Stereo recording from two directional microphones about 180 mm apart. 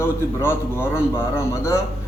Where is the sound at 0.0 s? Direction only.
15° left (ahead or behind).